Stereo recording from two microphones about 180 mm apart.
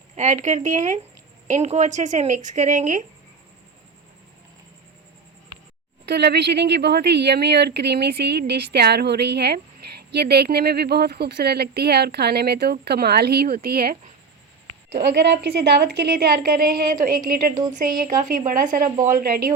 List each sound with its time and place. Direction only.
0.2 s speech: 40° right (ahead or behind)
6.1 s speech: 65° right (ahead or behind)
14.9 s speech: 65° right (ahead or behind)